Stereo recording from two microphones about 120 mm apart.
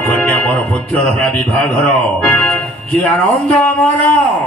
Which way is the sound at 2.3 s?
10° left (ahead or behind).